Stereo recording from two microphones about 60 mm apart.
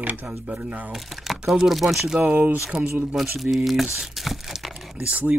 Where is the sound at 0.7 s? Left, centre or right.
Right.